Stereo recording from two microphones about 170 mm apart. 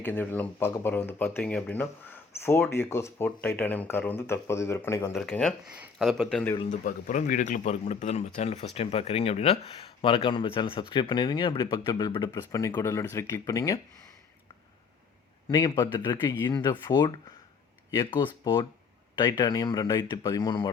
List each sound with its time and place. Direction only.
0.0 s speech: 10° left (ahead or behind)
6.7 s speech: 50° left (ahead or behind); by 13.7 s 20° left (ahead or behind)
15.4 s speech: 20° left (ahead or behind)
19.2 s speech: 20° left (ahead or behind)